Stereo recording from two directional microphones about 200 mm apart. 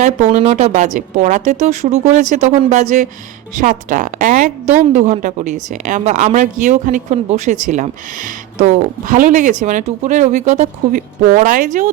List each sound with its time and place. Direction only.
0.0 s a woman's voice: 40° right (ahead or behind)